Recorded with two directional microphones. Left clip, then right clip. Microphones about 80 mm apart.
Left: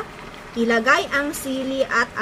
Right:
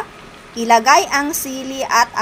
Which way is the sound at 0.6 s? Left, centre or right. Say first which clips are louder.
Right 6 dB; right.